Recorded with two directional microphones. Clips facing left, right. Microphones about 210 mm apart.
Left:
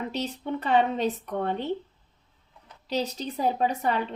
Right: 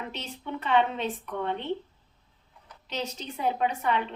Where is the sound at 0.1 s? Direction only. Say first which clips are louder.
Left 6 dB; 40° left (ahead or behind).